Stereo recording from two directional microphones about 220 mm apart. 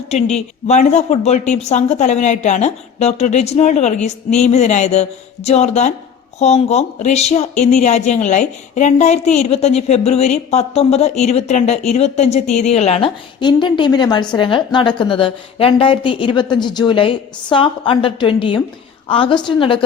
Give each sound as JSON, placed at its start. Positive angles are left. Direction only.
{"t": 0.1, "sound": "speech", "side_deg": 30}